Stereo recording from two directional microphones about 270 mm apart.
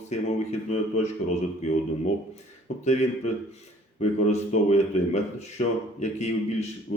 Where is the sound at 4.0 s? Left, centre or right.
Left.